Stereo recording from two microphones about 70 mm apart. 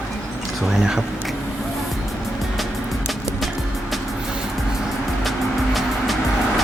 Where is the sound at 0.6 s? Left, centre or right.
Centre.